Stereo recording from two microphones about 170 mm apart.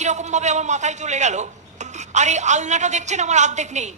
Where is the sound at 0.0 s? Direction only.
45° right (ahead or behind).